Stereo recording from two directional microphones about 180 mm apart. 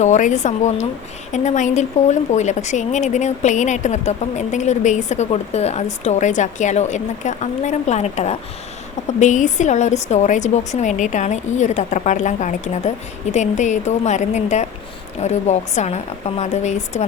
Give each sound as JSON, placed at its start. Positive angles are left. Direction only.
{"t": 0.0, "sound": "a woman's voice", "side_deg": 45}